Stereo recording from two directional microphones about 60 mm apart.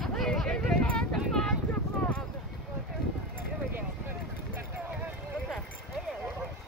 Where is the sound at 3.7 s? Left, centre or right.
Right.